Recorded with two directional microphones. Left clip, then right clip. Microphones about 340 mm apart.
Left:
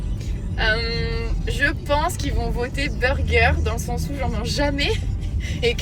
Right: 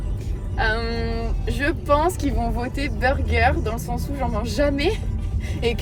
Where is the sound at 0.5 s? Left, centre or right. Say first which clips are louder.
Left 1 dB; centre.